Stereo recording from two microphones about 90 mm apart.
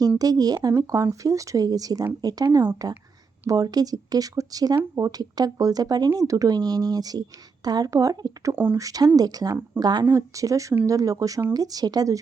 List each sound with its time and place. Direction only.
0.2 s a woman's voice: 45° right (ahead or behind)
8.5 s speech: 20° right (ahead or behind)
8.8 s a woman's voice: 40° right (ahead or behind)
10.1 s a woman's voice: 35° right (ahead or behind)